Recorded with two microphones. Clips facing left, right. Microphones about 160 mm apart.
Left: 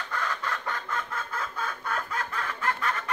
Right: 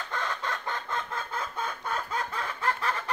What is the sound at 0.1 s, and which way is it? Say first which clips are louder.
Chicken: left 1 dB; 25° right (ahead or behind).